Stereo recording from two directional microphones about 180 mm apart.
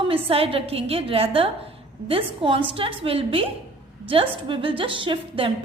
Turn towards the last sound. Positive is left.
turn(degrees=-30)  # may be behind; listen again after turning